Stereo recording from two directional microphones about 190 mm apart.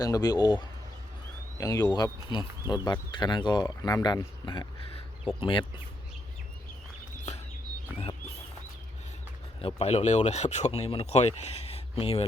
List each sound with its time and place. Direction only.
0.0 s speech: 20° left (ahead or behind)
9.6 s speech: 30° left (ahead or behind)